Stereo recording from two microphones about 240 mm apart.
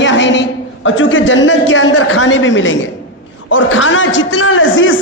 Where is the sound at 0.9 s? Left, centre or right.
Left.